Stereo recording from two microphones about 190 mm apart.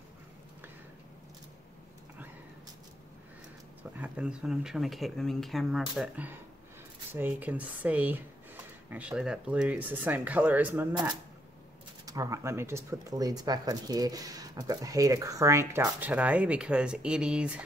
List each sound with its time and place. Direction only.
3.9 s speech: 5° right (ahead or behind)
12.1 s speech: 15° right (ahead or behind)